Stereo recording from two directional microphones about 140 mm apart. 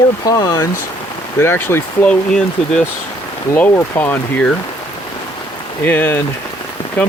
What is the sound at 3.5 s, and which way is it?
Speech, 10° left (ahead or behind).